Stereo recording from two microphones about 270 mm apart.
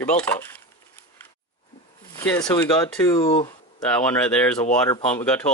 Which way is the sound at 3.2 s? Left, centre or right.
Left.